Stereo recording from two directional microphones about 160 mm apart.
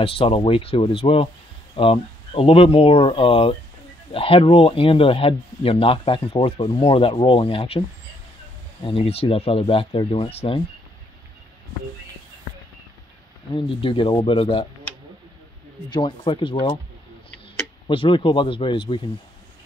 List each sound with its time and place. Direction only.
0.0 s speech: 35° left (ahead or behind)
8.8 s speech: 35° left (ahead or behind)
13.5 s speech: 35° left (ahead or behind)
15.9 s speech: 30° left (ahead or behind)
17.8 s speech: 30° left (ahead or behind)